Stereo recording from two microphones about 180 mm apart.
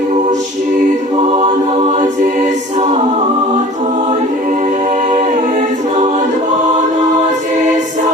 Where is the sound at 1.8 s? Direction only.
40° right (ahead or behind).